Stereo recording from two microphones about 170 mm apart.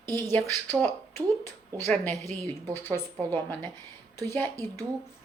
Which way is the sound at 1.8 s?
10° left (ahead or behind).